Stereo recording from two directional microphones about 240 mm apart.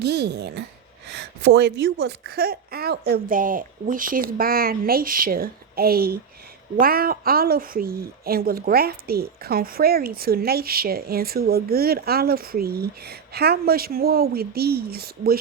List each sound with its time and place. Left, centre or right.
0.0 s a woman's voice: right